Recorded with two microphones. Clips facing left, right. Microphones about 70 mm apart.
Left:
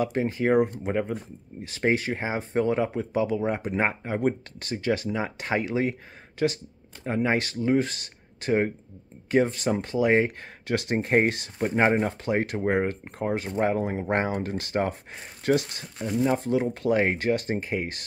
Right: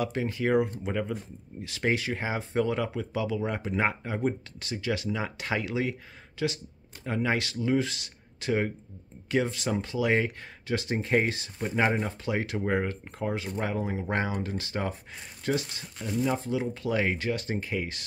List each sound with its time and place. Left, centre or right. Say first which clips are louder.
0.0 s speech: left 4 dB; left
4.3 s speech: left 4 dB; left
10.7 s speech: left 3 dB; left
13.5 s speech: left 7 dB; left
13.7 s speech: left 4 dB; left
16.0 s speech: left 4 dB; left
16.3 s speech: left 5 dB; left